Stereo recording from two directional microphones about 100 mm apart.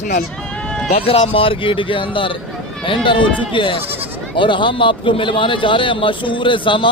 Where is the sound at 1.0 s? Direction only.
70° left (ahead or behind).